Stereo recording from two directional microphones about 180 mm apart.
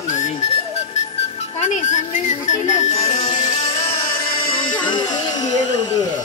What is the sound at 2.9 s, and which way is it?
Music, 35° left (ahead or behind).